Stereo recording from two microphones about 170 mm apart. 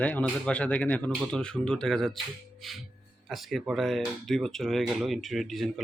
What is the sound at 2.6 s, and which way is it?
Music, centre (ahead or behind).